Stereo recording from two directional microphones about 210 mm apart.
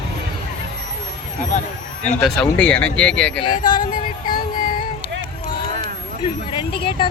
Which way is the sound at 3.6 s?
40° left (ahead or behind).